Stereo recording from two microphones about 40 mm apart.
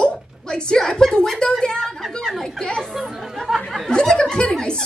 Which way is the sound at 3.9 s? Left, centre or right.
Centre.